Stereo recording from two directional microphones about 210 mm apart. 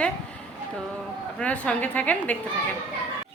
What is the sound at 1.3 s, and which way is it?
A woman's voice, 5° left (ahead or behind).